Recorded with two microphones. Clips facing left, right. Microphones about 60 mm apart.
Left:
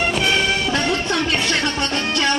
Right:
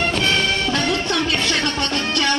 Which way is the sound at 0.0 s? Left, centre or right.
Centre.